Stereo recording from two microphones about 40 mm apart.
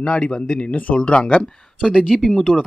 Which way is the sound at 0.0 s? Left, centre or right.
Left.